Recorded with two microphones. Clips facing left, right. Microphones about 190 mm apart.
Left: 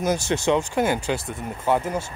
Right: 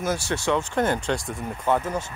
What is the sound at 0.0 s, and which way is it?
Speech, 20° left (ahead or behind).